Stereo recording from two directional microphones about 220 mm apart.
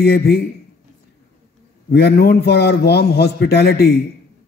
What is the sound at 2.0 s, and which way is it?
A man's voice, 45° left (ahead or behind).